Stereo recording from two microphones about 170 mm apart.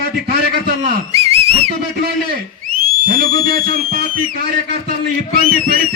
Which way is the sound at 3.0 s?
55° right (ahead or behind).